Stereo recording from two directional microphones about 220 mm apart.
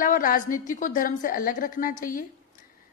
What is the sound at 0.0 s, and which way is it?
A woman's voice, 40° left (ahead or behind).